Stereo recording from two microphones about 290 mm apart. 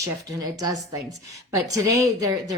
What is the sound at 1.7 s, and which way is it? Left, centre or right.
Speech, right.